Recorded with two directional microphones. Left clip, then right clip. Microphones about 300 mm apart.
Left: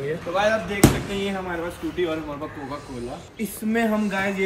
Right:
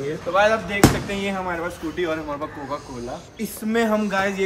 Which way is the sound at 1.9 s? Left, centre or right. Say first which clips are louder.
Right 1 dB; centre.